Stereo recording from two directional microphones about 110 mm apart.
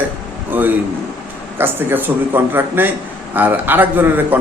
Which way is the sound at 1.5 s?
20° right (ahead or behind).